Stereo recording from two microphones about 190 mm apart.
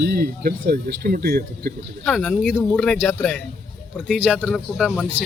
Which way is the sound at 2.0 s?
5° left (ahead or behind).